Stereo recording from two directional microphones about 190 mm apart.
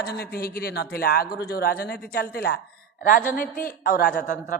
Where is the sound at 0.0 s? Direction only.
55° left (ahead or behind).